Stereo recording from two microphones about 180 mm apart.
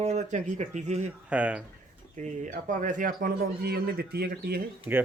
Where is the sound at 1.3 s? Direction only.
10° right (ahead or behind).